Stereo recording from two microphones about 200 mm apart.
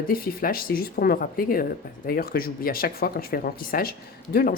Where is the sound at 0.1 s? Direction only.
45° left (ahead or behind).